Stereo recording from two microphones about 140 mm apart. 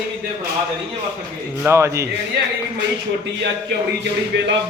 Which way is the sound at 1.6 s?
20° right (ahead or behind).